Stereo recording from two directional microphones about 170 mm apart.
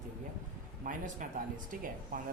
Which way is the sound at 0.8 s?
50° right (ahead or behind).